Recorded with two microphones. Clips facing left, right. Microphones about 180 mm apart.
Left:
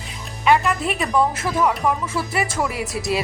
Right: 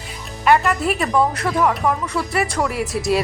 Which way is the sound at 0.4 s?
Centre (ahead or behind).